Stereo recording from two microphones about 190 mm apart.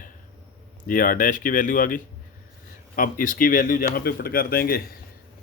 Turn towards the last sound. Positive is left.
turn(degrees=50)  # may be behind; listen again after turning